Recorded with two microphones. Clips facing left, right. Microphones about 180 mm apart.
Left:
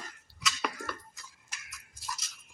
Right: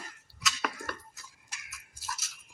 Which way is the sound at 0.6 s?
Centre (ahead or behind).